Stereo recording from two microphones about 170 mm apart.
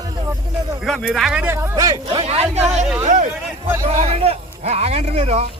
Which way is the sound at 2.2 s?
40° right (ahead or behind).